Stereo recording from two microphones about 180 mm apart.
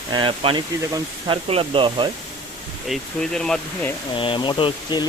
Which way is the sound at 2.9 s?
5° left (ahead or behind).